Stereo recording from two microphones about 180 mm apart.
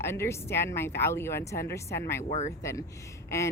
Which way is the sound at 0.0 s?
15° left (ahead or behind).